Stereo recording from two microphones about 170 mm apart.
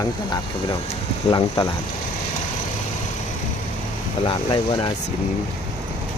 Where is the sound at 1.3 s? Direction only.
25° left (ahead or behind).